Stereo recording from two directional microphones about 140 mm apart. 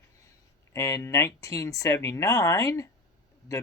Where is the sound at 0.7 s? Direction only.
25° left (ahead or behind).